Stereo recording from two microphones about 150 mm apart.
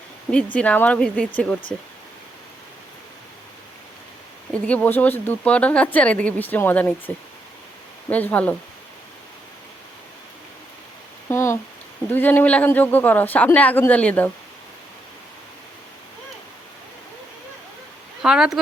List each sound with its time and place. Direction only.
0.3 s speech: 10° left (ahead or behind)
4.5 s speech: 10° left (ahead or behind)
8.1 s speech: 10° left (ahead or behind)
11.3 s a sound: 15° left (ahead or behind)
12.0 s speech: 10° left (ahead or behind)
18.2 s speech: 5° right (ahead or behind)